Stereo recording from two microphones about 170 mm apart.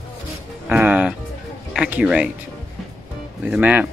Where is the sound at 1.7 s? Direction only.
5° right (ahead or behind).